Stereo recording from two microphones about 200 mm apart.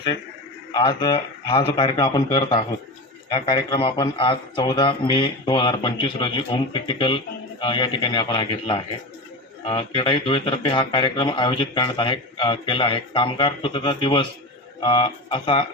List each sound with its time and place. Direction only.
0.7 s speech: 20° left (ahead or behind)